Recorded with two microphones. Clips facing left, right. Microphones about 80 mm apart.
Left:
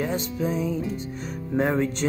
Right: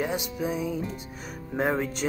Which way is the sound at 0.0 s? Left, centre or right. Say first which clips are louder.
Left 2 dB; centre.